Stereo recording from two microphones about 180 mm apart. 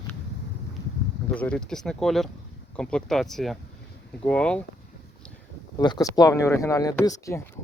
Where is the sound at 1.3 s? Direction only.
5° left (ahead or behind).